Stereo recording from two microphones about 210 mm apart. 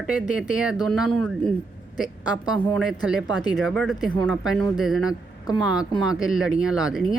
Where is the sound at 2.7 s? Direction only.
Centre (ahead or behind).